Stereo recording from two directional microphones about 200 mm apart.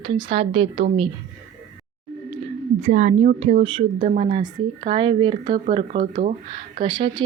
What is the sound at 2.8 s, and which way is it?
A woman's voice, 35° right (ahead or behind).